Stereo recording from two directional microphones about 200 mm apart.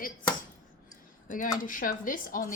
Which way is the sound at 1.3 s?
40° left (ahead or behind).